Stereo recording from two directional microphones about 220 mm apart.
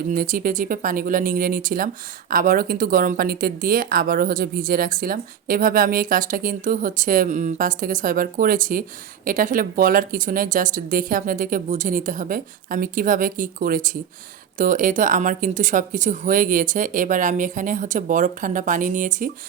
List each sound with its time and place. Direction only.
0.1 s speech: 40° right (ahead or behind)